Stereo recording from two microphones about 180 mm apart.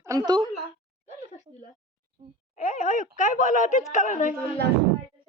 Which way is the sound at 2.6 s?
45° left (ahead or behind).